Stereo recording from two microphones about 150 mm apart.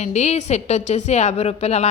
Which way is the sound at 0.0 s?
50° left (ahead or behind).